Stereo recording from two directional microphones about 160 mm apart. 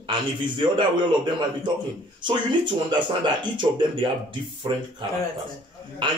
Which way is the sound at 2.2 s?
30° right (ahead or behind).